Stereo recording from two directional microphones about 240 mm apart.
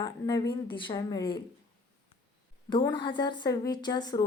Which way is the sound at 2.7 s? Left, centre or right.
Centre.